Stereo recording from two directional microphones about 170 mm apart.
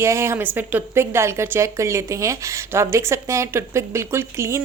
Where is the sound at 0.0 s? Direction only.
15° right (ahead or behind).